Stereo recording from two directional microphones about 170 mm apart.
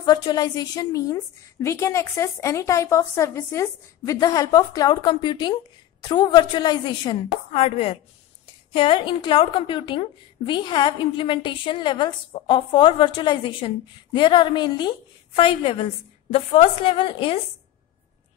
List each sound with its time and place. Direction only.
0.0 s a woman's voice: 25° left (ahead or behind)